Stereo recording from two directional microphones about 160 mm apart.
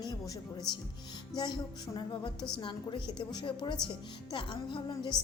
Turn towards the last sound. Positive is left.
turn(degrees=30)  # may be behind; listen again after turning